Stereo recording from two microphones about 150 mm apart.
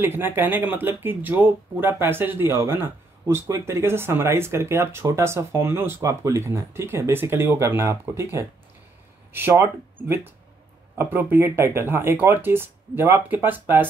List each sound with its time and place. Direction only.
0.0 s speech: 15° right (ahead or behind)